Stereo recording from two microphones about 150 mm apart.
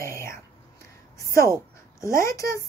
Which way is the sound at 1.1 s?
20° left (ahead or behind).